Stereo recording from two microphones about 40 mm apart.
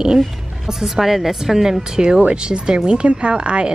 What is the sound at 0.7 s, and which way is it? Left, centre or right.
A woman's voice, centre.